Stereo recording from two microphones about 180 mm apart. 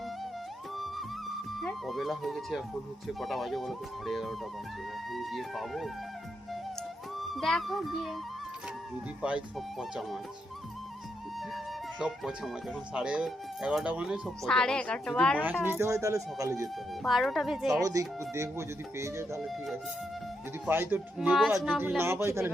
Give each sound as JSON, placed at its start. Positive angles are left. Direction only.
{"t": 1.5, "sound": "speech", "side_deg": 0}
{"t": 7.2, "sound": "speech", "side_deg": 0}
{"t": 9.2, "sound": "speech", "side_deg": -5}
{"t": 11.3, "sound": "speech", "side_deg": 0}
{"t": 15.6, "sound": "speech", "side_deg": -15}
{"t": 17.0, "sound": "speech", "side_deg": 0}
{"t": 17.8, "sound": "speech", "side_deg": -20}
{"t": 19.4, "sound": "speech", "side_deg": 0}
{"t": 20.7, "sound": "speech", "side_deg": -10}
{"t": 21.8, "sound": "speech", "side_deg": -10}